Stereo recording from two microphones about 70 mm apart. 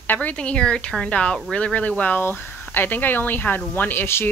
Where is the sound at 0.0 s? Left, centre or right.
Left.